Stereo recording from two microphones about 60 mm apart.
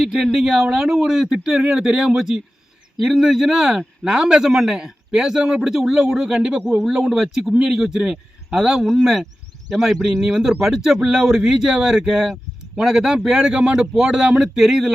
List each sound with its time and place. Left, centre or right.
0.3 s a man's voice: centre
13.7 s a man's voice: centre